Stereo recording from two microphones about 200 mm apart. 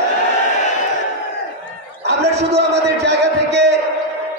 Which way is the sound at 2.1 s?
60° right (ahead or behind).